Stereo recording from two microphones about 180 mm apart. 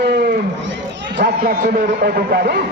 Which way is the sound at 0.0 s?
65° right (ahead or behind).